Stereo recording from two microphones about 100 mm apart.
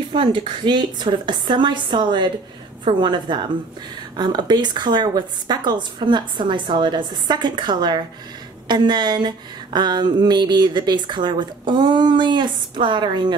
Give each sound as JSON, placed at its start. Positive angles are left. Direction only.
{"t": 0.1, "sound": "speech", "side_deg": -60}